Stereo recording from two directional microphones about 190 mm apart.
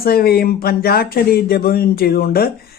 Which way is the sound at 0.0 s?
55° left (ahead or behind).